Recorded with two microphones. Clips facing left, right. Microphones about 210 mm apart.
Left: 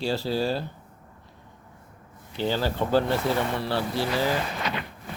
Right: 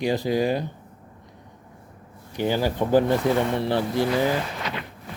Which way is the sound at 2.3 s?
15° right (ahead or behind).